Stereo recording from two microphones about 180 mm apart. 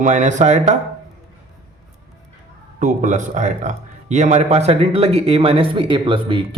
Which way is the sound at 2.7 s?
45° right (ahead or behind).